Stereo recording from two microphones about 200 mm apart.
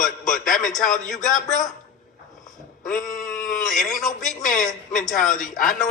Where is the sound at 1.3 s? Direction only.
40° left (ahead or behind).